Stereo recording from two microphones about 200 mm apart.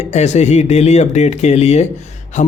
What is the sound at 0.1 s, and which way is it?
A man's voice, 35° left (ahead or behind).